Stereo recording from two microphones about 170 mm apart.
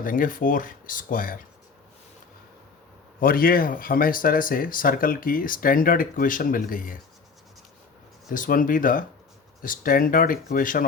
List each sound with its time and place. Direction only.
0.0 s speech: 55° left (ahead or behind)
3.2 s speech: 60° left (ahead or behind)
8.3 s speech: 55° left (ahead or behind)